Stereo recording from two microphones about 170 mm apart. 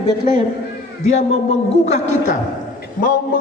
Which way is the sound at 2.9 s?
55° left (ahead or behind).